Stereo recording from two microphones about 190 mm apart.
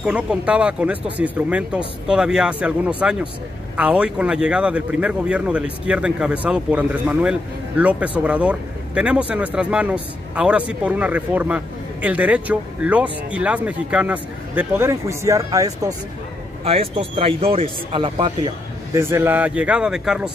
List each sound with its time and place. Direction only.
0.0 s speech: 5° right (ahead or behind)
16.6 s a man's voice: 30° right (ahead or behind)
18.9 s speech: 10° right (ahead or behind)